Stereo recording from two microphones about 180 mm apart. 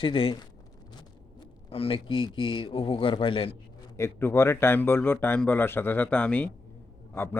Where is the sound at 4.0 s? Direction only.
15° left (ahead or behind).